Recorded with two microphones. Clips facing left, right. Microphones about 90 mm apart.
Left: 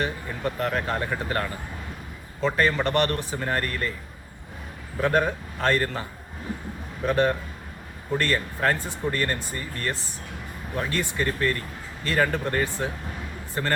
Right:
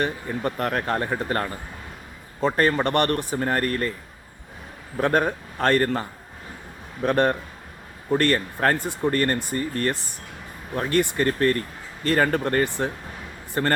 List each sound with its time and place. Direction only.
0.0 s speech: 50° right (ahead or behind)
5.1 s speech: 50° right (ahead or behind)